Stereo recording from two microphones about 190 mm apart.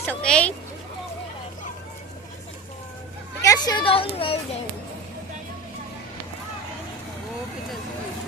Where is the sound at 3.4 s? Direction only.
20° left (ahead or behind).